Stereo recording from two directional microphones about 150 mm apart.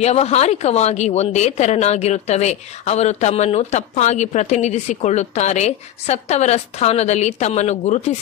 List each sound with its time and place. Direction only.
0.0 s speech: 45° left (ahead or behind)